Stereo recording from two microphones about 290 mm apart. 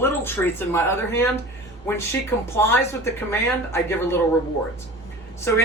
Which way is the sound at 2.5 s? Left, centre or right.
Centre.